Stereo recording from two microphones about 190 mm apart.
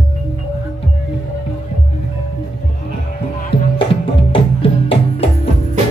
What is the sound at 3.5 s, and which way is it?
Music, 30° left (ahead or behind).